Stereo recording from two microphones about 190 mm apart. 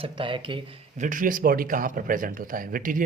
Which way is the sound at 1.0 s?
45° right (ahead or behind).